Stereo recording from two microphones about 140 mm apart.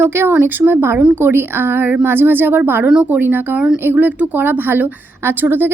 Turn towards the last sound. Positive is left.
turn(degrees=-15)  # may be behind; listen again after turning